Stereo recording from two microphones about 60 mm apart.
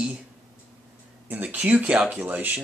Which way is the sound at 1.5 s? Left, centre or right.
Right.